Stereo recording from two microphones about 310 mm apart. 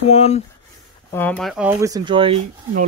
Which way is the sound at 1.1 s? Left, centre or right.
Centre.